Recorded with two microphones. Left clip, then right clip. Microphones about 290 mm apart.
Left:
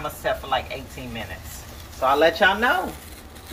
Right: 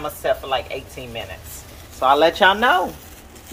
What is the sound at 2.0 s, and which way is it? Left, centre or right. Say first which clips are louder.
Speech: right 3 dB; centre.